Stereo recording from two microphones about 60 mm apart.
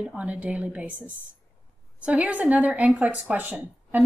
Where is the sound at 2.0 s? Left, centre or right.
Right.